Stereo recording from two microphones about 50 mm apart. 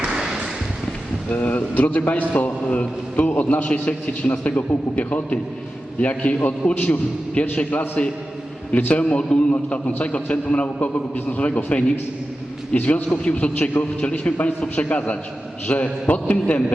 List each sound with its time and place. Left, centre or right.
1.3 s a man's voice: left
7.4 s a man's voice: left
8.7 s a man's voice: left
16.3 s a man's voice: left